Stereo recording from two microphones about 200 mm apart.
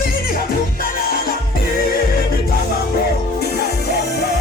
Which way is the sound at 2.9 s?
55° left (ahead or behind).